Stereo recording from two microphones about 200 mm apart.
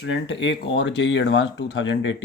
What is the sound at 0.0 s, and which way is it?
Speech, 65° left (ahead or behind).